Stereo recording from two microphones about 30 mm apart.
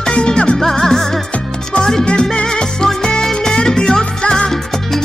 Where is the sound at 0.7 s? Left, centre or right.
Centre.